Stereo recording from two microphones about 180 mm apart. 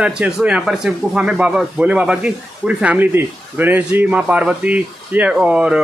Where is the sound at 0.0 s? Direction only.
5° right (ahead or behind).